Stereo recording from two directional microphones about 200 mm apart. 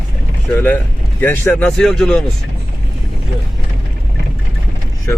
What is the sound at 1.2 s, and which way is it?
Speech, 10° left (ahead or behind).